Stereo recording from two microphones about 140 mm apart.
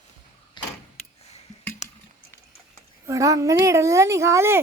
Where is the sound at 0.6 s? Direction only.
30° left (ahead or behind).